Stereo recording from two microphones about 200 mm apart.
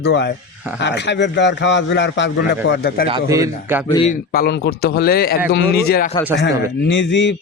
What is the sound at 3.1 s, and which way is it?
Speech, 20° right (ahead or behind).